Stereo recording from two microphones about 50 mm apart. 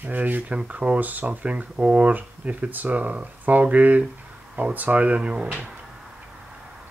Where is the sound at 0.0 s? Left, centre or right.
Right.